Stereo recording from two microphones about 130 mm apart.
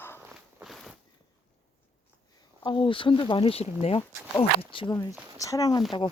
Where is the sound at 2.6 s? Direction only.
40° left (ahead or behind).